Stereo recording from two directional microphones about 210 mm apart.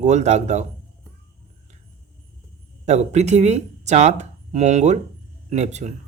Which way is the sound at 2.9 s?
30° right (ahead or behind).